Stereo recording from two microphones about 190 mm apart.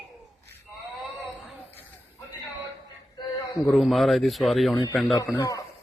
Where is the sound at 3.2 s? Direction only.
25° left (ahead or behind).